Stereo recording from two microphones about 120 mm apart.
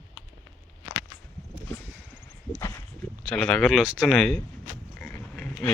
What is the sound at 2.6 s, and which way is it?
Walk, 25° left (ahead or behind).